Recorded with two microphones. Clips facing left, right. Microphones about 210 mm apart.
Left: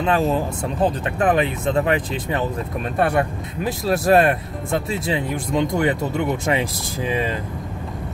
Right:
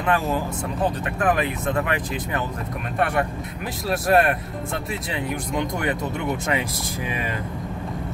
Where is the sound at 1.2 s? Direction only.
25° left (ahead or behind).